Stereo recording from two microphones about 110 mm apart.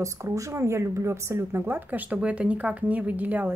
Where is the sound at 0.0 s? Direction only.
30° right (ahead or behind).